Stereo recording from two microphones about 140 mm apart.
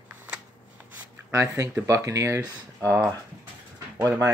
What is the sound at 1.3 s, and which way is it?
Speech, 20° right (ahead or behind).